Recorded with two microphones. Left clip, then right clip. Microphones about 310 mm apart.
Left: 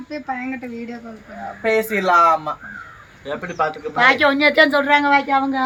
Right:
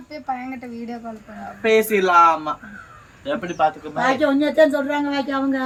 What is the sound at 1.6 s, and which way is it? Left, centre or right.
Speech, left.